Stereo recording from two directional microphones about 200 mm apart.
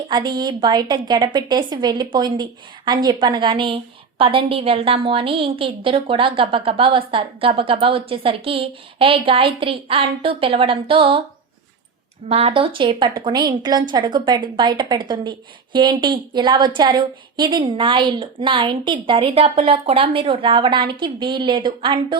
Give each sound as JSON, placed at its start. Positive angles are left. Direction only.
{"t": 0.1, "sound": "a woman's voice", "side_deg": -20}
{"t": 12.3, "sound": "a woman's voice", "side_deg": -30}